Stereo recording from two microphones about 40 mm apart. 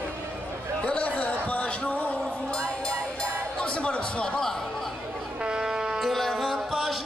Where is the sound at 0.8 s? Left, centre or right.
Left.